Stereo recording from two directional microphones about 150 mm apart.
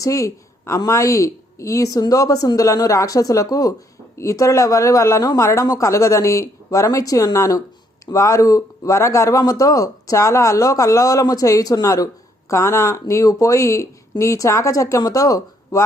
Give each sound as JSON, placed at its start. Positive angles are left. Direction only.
{"t": 0.0, "sound": "speech", "side_deg": 20}